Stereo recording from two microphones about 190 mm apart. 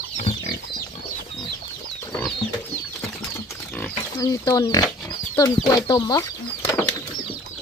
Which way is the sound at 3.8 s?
20° left (ahead or behind).